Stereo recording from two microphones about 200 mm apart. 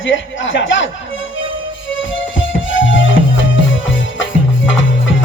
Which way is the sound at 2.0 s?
70° left (ahead or behind).